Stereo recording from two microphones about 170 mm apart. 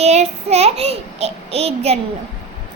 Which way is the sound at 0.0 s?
40° right (ahead or behind).